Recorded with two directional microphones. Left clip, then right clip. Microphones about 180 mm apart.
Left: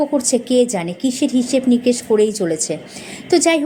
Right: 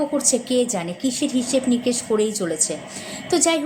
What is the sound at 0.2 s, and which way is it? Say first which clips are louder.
A woman's voice: left 5 dB; 15° left (ahead or behind).